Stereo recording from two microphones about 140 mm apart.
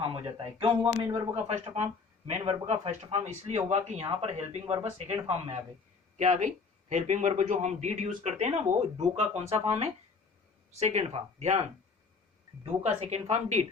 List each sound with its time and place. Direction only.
0.1 s speech: 40° right (ahead or behind)
1.5 s speech: 55° right (ahead or behind)
6.1 s a man's voice: 55° right (ahead or behind)
12.8 s speech: 50° right (ahead or behind)